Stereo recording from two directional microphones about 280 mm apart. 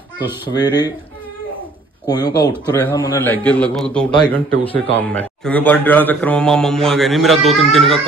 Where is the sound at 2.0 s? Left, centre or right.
Centre.